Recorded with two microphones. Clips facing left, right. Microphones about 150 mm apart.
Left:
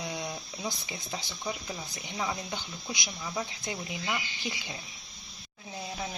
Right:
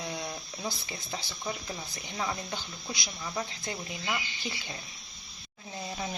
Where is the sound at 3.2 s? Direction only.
Centre (ahead or behind).